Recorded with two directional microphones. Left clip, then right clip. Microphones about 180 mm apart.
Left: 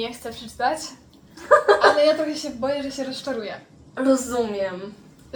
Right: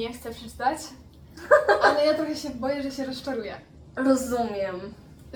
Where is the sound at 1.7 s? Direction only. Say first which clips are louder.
Left 4 dB; 15° left (ahead or behind).